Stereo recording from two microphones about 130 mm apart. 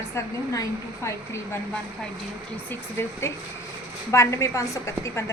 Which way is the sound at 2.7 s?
20° left (ahead or behind).